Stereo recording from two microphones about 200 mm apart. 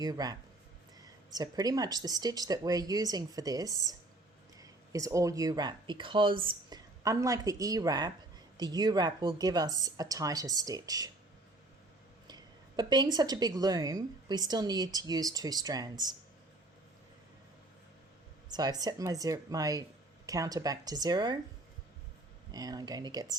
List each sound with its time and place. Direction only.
0.0 s a woman's voice: 20° right (ahead or behind)
12.3 s a woman's voice: 20° right (ahead or behind)
18.4 s a woman's voice: 20° right (ahead or behind)
22.5 s a woman's voice: 20° right (ahead or behind)